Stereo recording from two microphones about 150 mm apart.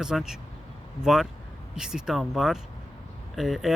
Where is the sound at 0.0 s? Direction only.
5° right (ahead or behind).